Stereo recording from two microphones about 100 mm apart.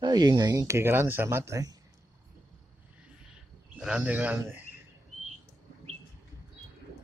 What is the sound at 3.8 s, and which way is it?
Speech, 15° right (ahead or behind).